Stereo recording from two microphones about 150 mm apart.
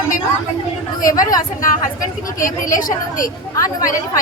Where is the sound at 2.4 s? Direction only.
65° left (ahead or behind).